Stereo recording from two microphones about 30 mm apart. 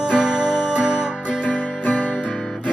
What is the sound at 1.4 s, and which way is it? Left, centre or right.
Music, left.